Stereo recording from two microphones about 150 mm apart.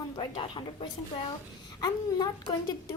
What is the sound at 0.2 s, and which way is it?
A woman's voice, 30° left (ahead or behind).